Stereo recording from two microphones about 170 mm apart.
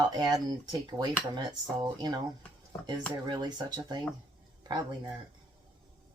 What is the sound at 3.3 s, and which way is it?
Speech, 25° right (ahead or behind).